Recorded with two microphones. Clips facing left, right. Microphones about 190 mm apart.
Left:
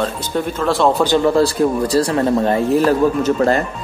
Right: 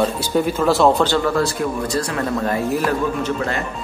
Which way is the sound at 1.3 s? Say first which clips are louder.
Left 6 dB; 30° left (ahead or behind).